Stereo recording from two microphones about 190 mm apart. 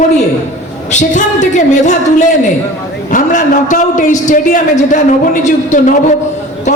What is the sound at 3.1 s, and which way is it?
A man's voice, 45° left (ahead or behind).